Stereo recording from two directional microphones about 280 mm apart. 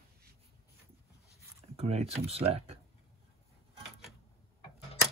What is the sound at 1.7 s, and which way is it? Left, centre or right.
Speech, right.